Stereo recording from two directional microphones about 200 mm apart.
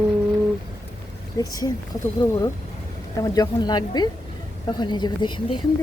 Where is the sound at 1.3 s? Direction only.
15° left (ahead or behind).